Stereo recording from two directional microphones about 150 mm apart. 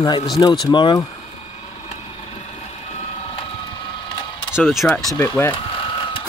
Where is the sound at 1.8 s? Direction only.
45° left (ahead or behind).